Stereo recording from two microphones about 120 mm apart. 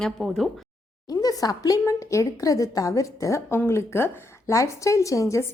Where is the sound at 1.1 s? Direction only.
30° left (ahead or behind).